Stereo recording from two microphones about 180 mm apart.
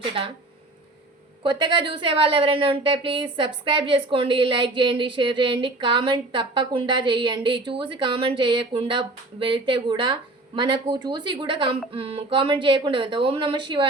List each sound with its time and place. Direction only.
0.0 s a woman's voice: 30° right (ahead or behind)
1.5 s a woman's voice: 25° right (ahead or behind)